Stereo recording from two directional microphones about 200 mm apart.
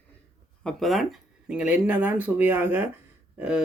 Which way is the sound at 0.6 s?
Centre (ahead or behind).